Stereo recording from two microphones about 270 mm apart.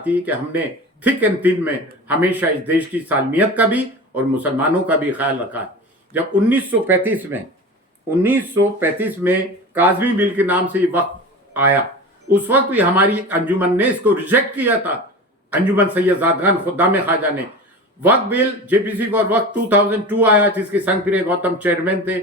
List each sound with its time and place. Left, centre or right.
0.0 s a man's voice: centre